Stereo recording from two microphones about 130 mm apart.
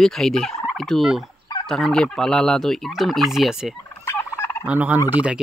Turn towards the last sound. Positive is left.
turn(degrees=-10)  # may be behind; listen again after turning